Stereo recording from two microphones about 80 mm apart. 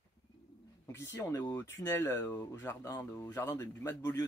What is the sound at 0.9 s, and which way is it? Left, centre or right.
Speech, left.